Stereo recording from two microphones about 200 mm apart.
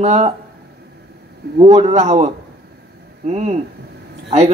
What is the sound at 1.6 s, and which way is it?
Speech, 30° right (ahead or behind).